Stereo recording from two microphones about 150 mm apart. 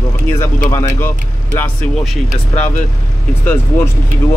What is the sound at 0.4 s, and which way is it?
Speech, 15° left (ahead or behind).